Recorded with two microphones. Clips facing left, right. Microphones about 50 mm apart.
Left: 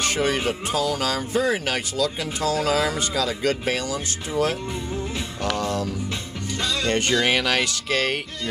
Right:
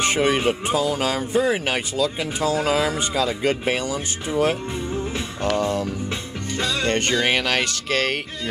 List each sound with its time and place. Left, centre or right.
0.0 s speech: centre
6.9 s speech: centre